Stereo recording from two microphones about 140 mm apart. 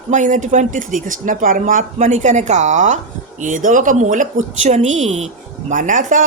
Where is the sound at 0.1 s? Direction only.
60° right (ahead or behind).